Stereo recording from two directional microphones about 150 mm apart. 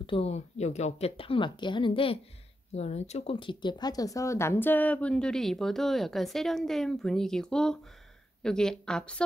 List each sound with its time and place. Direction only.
0.0 s speech: 40° left (ahead or behind)
2.7 s speech: 45° left (ahead or behind); by 9.2 s 5° left (ahead or behind)